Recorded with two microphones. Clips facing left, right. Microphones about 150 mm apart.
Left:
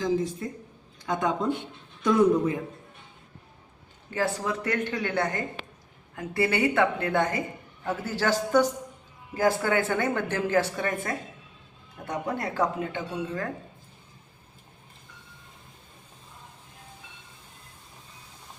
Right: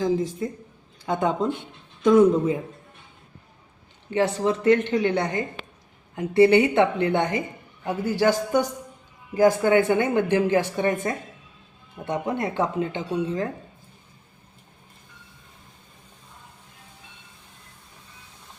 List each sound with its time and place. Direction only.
1.0 s a woman's voice: 25° right (ahead or behind)
4.1 s a woman's voice: 25° right (ahead or behind)